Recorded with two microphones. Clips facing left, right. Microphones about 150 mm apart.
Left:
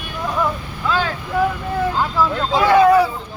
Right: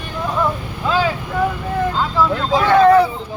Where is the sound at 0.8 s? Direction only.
20° right (ahead or behind).